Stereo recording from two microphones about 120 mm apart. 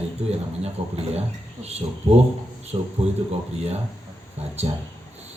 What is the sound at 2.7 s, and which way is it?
Speech, 45° right (ahead or behind).